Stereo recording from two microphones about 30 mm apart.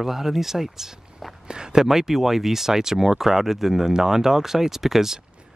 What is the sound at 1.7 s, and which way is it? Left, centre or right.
Speech, centre.